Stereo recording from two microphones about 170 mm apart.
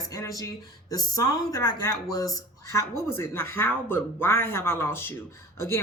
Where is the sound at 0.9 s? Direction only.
20° left (ahead or behind).